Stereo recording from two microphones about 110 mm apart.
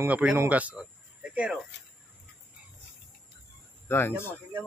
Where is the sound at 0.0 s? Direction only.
10° right (ahead or behind).